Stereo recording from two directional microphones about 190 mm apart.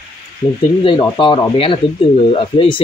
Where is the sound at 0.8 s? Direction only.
25° left (ahead or behind).